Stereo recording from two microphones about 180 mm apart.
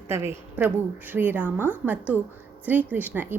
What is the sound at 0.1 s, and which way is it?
A woman's voice, 15° right (ahead or behind).